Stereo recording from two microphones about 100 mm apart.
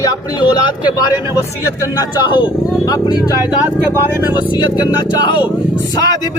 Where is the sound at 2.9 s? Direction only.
35° left (ahead or behind).